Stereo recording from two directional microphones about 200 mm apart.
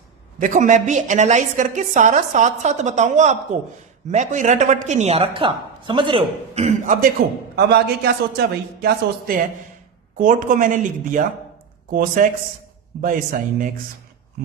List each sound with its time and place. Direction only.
0.3 s a woman's voice: 40° right (ahead or behind)
7.5 s a man's voice: 55° right (ahead or behind)